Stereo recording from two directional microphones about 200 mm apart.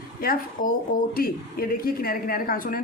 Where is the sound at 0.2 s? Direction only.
45° left (ahead or behind).